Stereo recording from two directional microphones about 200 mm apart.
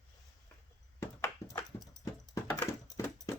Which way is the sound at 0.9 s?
15° left (ahead or behind).